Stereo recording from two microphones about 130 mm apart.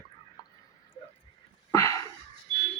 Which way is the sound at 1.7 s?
25° left (ahead or behind).